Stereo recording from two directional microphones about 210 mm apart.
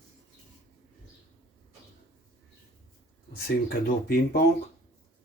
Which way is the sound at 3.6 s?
45° left (ahead or behind).